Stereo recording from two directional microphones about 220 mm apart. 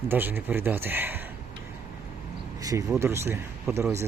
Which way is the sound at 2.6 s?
15° right (ahead or behind).